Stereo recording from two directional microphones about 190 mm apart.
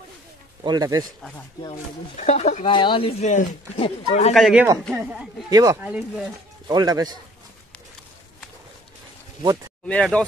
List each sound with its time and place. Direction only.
0.7 s speech: 20° right (ahead or behind)
2.1 s speech: 35° left (ahead or behind)
4.3 s speech: centre (ahead or behind)
5.5 s speech: 20° right (ahead or behind)
5.8 s speech: 5° right (ahead or behind)
6.7 s speech: 20° right (ahead or behind)
9.8 s speech: 5° left (ahead or behind)